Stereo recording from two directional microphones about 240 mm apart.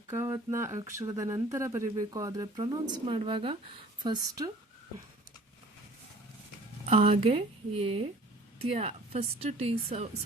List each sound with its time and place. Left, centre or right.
0.1 s speech: centre
6.8 s a woman's voice: right